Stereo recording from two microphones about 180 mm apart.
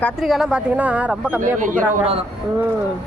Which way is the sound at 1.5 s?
45° right (ahead or behind).